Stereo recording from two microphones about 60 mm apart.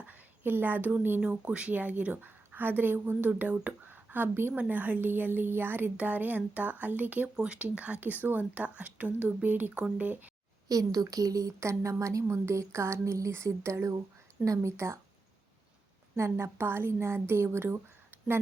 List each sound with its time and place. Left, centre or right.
0.0 s a sound: right
0.5 s a woman's voice: right
7.3 s a woman's voice: centre
10.7 s a woman's voice: right
16.1 s a woman's voice: right